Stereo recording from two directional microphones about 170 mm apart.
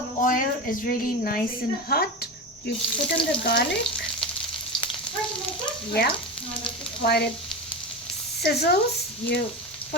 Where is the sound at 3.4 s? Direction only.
80° left.